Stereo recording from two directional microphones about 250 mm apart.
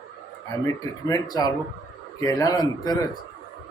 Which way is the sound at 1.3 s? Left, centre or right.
Centre.